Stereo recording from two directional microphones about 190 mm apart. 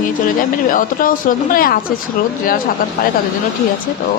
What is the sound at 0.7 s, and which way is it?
A woman's voice, 45° left (ahead or behind).